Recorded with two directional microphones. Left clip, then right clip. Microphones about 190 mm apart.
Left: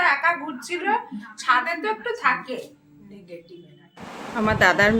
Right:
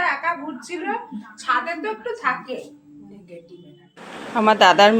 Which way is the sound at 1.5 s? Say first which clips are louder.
Left 1 dB; 5° left (ahead or behind).